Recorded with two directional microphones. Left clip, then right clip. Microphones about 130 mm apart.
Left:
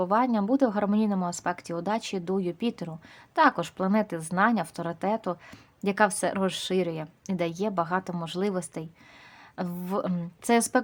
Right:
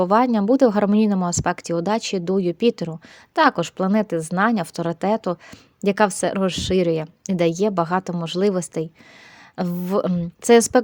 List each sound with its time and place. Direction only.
0.0 s a woman's voice: 50° right (ahead or behind)